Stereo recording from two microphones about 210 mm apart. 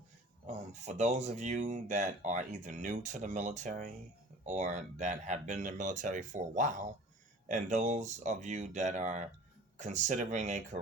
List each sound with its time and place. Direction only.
0.4 s speech: 35° right (ahead or behind)